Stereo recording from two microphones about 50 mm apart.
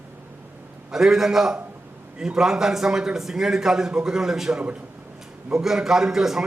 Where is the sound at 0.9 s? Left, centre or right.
Centre.